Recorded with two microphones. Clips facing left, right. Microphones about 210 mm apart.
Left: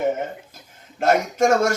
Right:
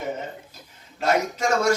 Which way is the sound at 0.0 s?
50° left (ahead or behind).